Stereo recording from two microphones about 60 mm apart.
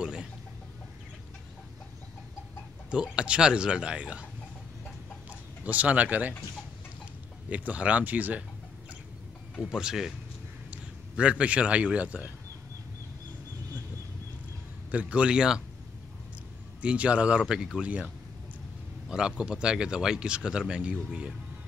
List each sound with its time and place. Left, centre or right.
0.0 s chicken: centre
2.9 s speech: centre
5.6 s speech: right
7.4 s speech: right
9.6 s a man's voice: centre
14.9 s speech: right
16.8 s speech: centre